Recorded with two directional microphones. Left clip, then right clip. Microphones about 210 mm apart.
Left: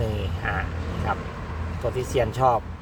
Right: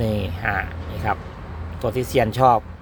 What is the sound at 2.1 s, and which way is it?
Speech, 45° right (ahead or behind).